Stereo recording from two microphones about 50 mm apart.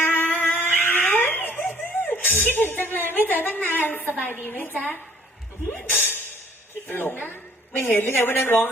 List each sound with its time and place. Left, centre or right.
0.0 s a sound: left
0.6 s cat: left
2.0 s a woman's voice: left